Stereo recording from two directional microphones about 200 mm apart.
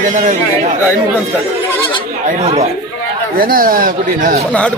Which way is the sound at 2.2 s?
30° right (ahead or behind).